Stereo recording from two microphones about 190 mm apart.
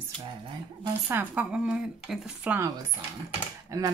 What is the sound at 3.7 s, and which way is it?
Speech, 15° right (ahead or behind).